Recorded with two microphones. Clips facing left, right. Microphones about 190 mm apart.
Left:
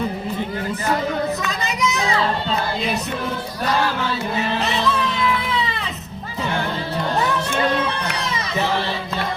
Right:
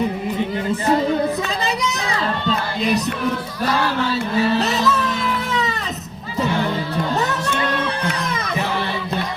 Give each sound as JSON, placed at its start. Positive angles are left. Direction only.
{"t": 1.6, "sound": "music", "side_deg": -35}
{"t": 4.5, "sound": "music", "side_deg": -40}